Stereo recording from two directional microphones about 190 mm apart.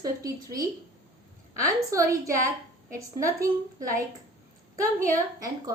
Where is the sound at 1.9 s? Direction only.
15° right (ahead or behind).